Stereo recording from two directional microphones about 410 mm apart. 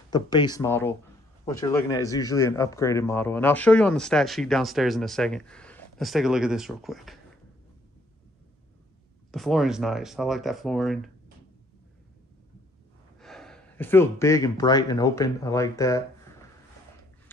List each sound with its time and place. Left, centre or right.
0.1 s a man's voice: centre
9.3 s a man's voice: centre
13.2 s speech: centre